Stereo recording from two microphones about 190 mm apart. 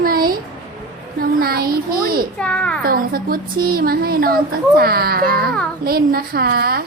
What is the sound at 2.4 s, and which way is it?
Speech, 5° left (ahead or behind).